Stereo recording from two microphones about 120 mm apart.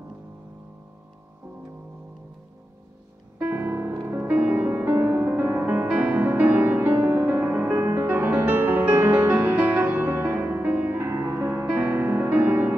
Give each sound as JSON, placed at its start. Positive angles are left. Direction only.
{"t": 3.3, "sound": "music", "side_deg": -15}